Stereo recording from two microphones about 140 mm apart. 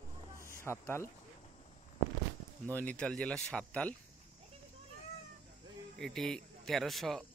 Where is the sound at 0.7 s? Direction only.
15° left (ahead or behind).